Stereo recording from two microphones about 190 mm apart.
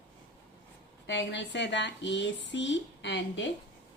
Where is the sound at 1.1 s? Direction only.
70° left (ahead or behind).